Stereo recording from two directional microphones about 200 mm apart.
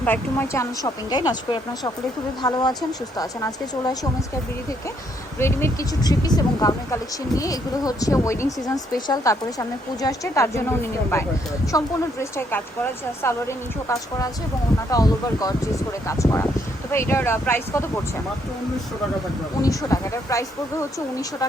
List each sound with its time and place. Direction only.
0.0 s speech: 10° left (ahead or behind)
5.4 s speech: 10° left (ahead or behind)
19.6 s speech: 15° left (ahead or behind)